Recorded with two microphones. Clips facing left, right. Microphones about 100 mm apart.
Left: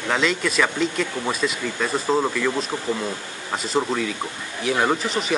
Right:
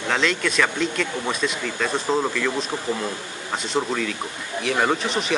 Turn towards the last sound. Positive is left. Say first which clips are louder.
# even
turn(degrees=0)  # may be behind; listen again after turning